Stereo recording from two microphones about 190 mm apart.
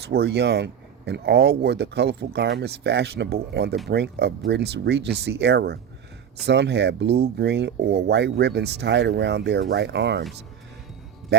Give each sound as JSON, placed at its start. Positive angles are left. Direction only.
{"t": 0.0, "sound": "speech", "side_deg": -60}